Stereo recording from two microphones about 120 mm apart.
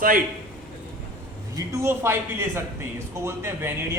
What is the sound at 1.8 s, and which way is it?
Speech, 20° right (ahead or behind).